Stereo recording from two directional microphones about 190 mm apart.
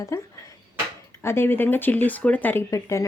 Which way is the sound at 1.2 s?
15° left (ahead or behind).